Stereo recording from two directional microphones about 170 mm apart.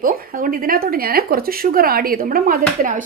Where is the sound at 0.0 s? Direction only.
55° right (ahead or behind).